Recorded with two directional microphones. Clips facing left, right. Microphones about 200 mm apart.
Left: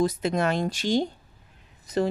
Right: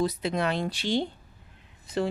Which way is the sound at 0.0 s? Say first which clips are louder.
Left 3 dB; 45° left (ahead or behind).